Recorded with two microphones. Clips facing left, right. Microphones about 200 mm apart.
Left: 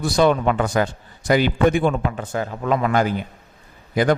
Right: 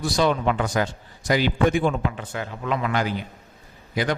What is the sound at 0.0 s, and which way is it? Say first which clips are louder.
A man's voice: left 4 dB; 55° left (ahead or behind).